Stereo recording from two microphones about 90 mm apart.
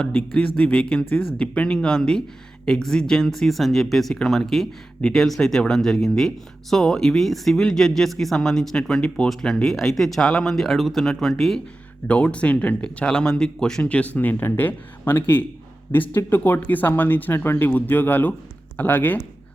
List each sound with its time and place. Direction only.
0.0 s speech: 20° left (ahead or behind)
12.0 s speech: 15° left (ahead or behind)